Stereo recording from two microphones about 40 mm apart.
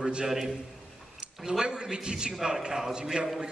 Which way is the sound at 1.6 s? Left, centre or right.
Right.